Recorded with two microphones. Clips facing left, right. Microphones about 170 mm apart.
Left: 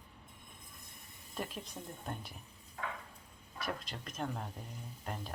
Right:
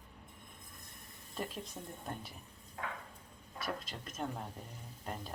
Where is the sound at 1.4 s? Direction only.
Centre (ahead or behind).